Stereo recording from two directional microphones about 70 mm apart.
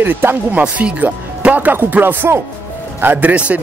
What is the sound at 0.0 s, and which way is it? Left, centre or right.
Speech, right.